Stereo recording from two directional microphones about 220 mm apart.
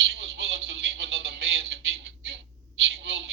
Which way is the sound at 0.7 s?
50° right (ahead or behind).